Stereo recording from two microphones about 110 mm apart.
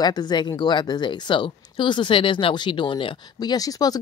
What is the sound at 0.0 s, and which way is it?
A woman's voice, 40° left (ahead or behind).